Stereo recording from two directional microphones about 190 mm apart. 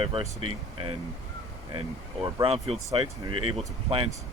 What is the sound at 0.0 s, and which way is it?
Speech, 30° right (ahead or behind).